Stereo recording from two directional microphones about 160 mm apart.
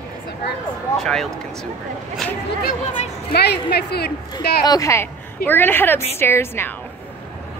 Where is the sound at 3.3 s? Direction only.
90° left.